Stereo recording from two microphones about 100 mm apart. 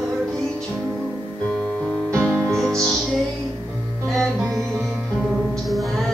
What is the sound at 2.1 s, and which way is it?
Music, 25° right (ahead or behind).